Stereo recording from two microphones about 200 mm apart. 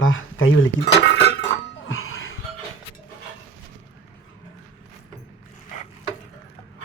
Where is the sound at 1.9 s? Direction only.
85° left.